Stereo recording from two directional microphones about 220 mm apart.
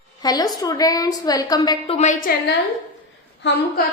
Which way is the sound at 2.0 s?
35° left (ahead or behind).